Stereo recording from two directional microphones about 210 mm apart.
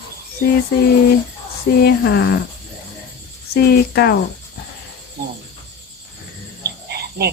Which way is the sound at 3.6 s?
50° left (ahead or behind).